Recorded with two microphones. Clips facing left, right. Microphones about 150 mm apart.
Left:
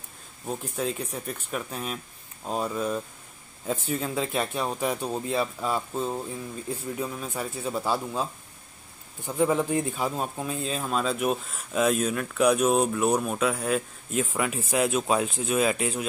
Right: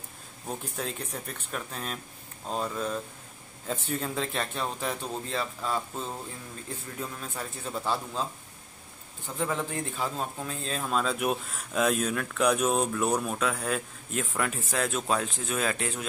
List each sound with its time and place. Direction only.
0.5 s a man's voice: 5° left (ahead or behind)